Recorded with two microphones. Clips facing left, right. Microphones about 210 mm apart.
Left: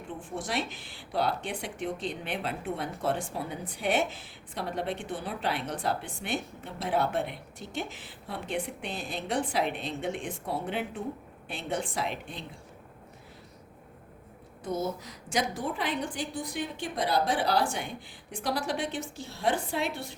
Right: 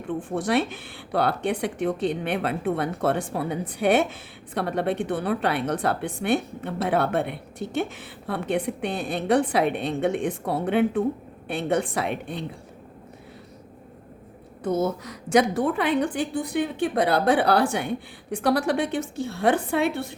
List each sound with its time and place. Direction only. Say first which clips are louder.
0.1 s speech: right 10 dB; 60° right (ahead or behind)
14.6 s speech: right 7 dB; 60° right (ahead or behind)